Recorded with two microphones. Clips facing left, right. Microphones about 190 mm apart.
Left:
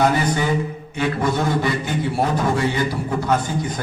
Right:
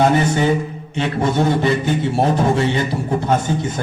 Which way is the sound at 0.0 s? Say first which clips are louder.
Right 4 dB; 25° right (ahead or behind).